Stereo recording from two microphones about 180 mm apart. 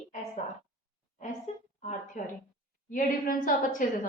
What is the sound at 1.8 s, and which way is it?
A woman's voice, 45° left (ahead or behind).